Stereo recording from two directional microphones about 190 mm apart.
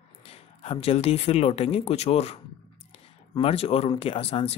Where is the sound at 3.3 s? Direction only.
30° left (ahead or behind).